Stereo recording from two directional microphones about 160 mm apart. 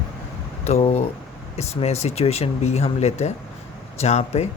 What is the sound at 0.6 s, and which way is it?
Speech, 40° left (ahead or behind).